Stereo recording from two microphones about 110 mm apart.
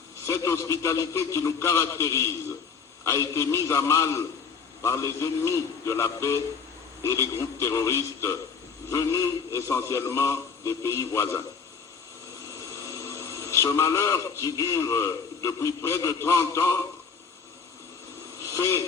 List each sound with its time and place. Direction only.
0.3 s a man's voice: 30° left (ahead or behind)
12.5 s speech: 30° left (ahead or behind)
18.4 s speech: 30° left (ahead or behind)